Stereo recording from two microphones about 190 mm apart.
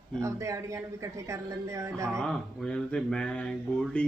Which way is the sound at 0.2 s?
15° right (ahead or behind).